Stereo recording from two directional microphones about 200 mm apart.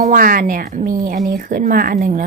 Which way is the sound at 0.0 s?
45° right (ahead or behind).